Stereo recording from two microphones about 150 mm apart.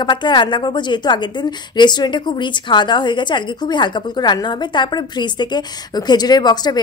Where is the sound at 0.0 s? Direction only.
30° left (ahead or behind).